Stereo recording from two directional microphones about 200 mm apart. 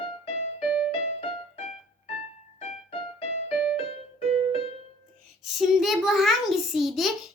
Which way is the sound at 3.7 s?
30° left (ahead or behind).